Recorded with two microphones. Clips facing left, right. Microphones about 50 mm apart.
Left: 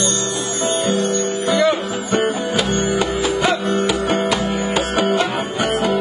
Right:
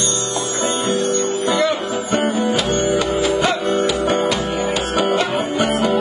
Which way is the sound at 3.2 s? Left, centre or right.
Centre.